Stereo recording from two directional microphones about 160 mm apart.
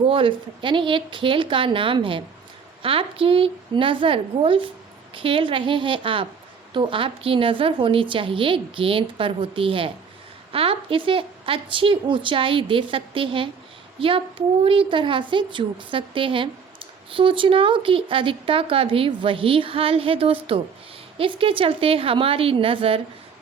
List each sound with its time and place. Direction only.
0.1 s speech: 35° right (ahead or behind)